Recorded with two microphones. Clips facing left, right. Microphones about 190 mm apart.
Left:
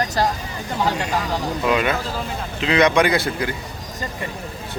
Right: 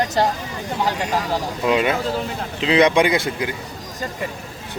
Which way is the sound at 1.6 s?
25° right (ahead or behind).